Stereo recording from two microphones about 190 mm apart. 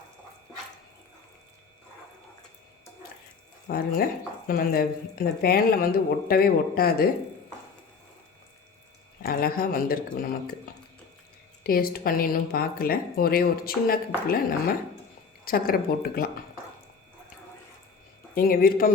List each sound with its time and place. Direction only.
3.7 s speech: 50° left (ahead or behind)
9.2 s speech: 50° left (ahead or behind)
11.6 s speech: 50° left (ahead or behind)
15.4 s speech: 50° left (ahead or behind)
18.3 s speech: 50° left (ahead or behind)